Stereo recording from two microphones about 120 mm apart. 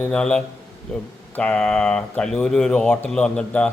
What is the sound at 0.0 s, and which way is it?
A man's voice, 10° left (ahead or behind).